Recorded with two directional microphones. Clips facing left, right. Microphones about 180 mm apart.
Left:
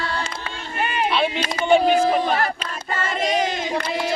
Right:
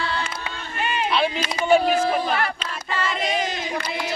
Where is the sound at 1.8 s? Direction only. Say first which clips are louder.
Left 3 dB; 40° left (ahead or behind).